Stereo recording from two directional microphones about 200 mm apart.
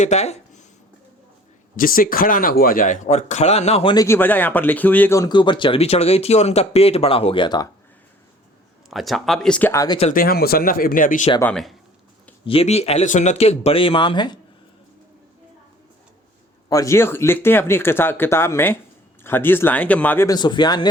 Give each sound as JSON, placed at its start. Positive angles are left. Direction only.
{"t": 0.0, "sound": "speech", "side_deg": 35}
{"t": 1.7, "sound": "speech", "side_deg": 45}
{"t": 3.9, "sound": "speech", "side_deg": 15}
{"t": 8.9, "sound": "speech", "side_deg": 0}
{"t": 10.0, "sound": "speech", "side_deg": 40}
{"t": 11.3, "sound": "speech", "side_deg": 5}
{"t": 12.5, "sound": "speech", "side_deg": 30}
{"t": 16.6, "sound": "speech", "side_deg": 15}